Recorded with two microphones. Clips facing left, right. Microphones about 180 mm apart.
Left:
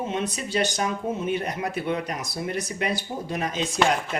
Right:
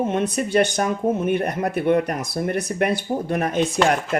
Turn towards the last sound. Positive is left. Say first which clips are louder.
# right 4 dB
turn(degrees=-60)  # may be behind; listen again after turning